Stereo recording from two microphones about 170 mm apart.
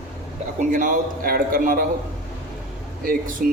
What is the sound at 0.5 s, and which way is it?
A man's voice, 50° right (ahead or behind).